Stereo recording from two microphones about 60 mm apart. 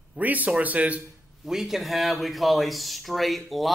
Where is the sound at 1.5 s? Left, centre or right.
Centre.